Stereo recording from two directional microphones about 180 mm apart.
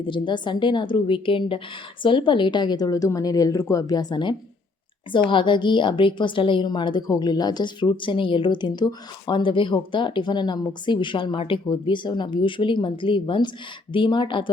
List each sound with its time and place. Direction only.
0.0 s a woman's voice: 25° left (ahead or behind)